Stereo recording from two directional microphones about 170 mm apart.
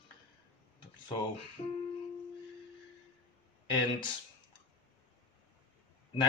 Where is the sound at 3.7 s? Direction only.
25° left (ahead or behind).